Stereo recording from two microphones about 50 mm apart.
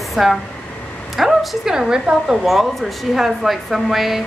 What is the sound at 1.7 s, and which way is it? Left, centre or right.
Speech, centre.